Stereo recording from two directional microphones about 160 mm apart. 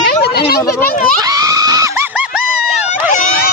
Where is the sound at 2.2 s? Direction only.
5° right (ahead or behind).